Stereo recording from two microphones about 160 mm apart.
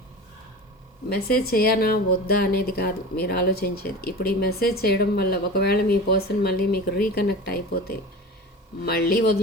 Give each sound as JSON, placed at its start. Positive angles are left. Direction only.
{"t": 1.1, "sound": "speech", "side_deg": 70}